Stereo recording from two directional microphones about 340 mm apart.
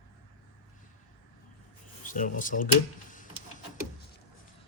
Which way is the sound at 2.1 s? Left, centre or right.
Left.